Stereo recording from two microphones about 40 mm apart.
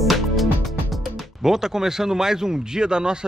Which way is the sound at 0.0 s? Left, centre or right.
Centre.